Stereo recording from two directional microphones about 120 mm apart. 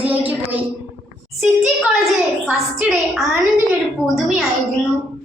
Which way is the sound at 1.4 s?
5° right (ahead or behind).